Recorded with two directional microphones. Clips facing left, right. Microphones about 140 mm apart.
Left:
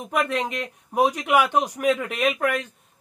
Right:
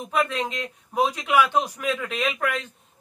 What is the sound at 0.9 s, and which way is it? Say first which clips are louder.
Speech: left 1 dB; 15° left (ahead or behind).